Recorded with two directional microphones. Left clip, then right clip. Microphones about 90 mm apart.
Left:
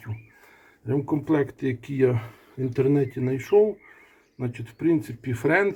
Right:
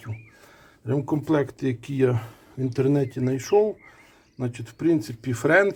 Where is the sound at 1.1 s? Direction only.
10° right (ahead or behind).